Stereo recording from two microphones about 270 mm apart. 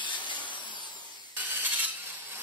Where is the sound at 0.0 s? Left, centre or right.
Centre.